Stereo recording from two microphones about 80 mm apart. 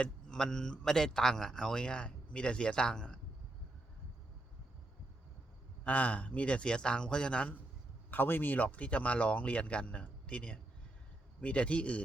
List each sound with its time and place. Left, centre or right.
0.0 s speech: centre
5.8 s speech: centre